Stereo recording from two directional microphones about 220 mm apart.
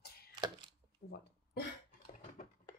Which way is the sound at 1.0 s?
40° left (ahead or behind).